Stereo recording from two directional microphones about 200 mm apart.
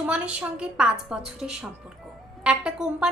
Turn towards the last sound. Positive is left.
turn(degrees=-5)  # may be behind; listen again after turning